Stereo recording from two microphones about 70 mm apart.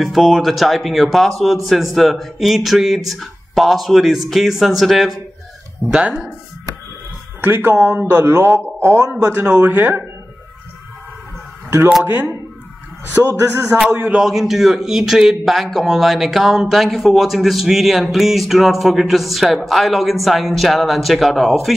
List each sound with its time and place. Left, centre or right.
0.0 s a man's voice: centre
5.9 s speech: centre
7.4 s a man's voice: right
12.0 s speech: right
13.2 s a sound: right
14.1 s a man's voice: centre